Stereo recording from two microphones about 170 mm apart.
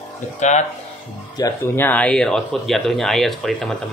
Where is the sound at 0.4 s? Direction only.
45° left (ahead or behind).